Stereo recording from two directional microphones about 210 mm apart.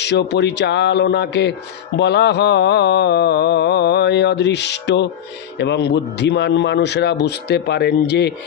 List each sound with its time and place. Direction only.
0.0 s speech: 55° left (ahead or behind)
2.0 s mantra: 55° left (ahead or behind)